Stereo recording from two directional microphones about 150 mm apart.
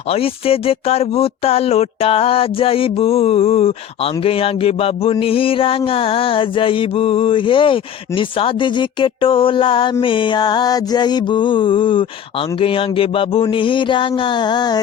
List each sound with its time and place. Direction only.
0.1 s speech: 40° left (ahead or behind)